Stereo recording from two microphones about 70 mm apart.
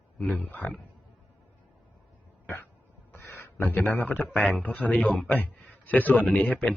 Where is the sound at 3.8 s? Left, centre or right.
Left.